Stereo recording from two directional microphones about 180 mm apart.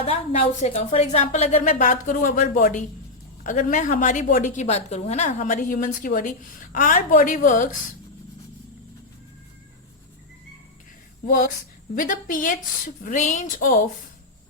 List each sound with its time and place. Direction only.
0.0 s a woman's voice: 35° left (ahead or behind)
11.9 s a woman's voice: 50° left (ahead or behind)